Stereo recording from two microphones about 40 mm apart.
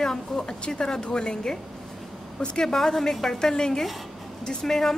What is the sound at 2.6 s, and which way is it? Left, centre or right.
Speech, centre.